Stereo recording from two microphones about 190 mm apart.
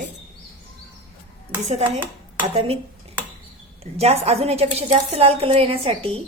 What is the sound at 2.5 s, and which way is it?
Speech, 30° right (ahead or behind).